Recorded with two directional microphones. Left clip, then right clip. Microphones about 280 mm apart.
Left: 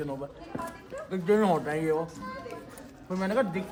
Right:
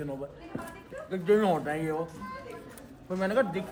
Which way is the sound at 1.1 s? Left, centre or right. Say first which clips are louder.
Even; centre.